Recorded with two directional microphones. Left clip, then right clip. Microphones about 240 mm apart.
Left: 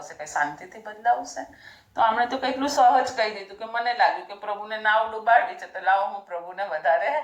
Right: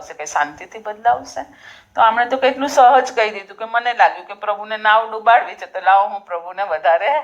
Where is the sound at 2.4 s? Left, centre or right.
Right.